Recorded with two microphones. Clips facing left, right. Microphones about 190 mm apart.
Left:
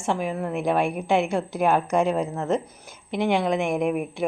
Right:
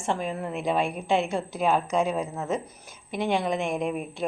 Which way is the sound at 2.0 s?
Centre (ahead or behind).